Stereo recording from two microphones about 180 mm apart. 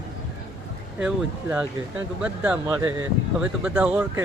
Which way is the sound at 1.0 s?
10° right (ahead or behind).